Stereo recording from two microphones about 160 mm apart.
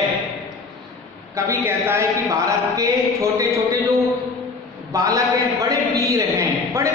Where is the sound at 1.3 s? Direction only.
15° right (ahead or behind).